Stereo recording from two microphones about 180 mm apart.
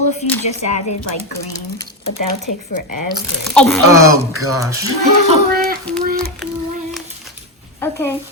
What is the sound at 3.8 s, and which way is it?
Speech, 15° right (ahead or behind).